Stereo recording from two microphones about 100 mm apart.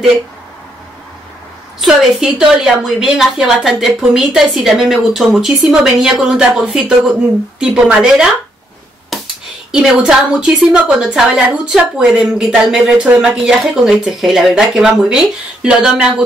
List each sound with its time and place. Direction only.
1.8 s a woman's voice: 5° right (ahead or behind)
9.1 s a sound: centre (ahead or behind)
9.7 s a woman's voice: 5° right (ahead or behind)